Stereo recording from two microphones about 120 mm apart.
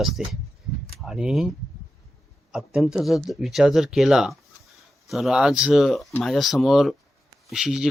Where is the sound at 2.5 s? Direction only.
5° right (ahead or behind).